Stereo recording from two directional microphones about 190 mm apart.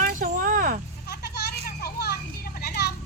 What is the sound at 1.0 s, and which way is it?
Children playing, 60° left (ahead or behind).